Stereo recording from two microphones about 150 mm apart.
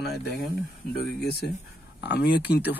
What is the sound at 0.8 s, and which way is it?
Speech, 90° left.